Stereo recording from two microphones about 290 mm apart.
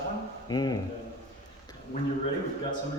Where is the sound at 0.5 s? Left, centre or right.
Centre.